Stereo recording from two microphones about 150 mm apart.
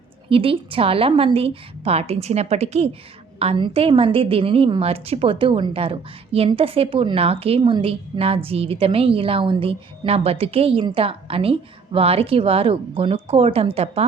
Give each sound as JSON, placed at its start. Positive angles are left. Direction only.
{"t": 0.3, "sound": "a woman's voice", "side_deg": -35}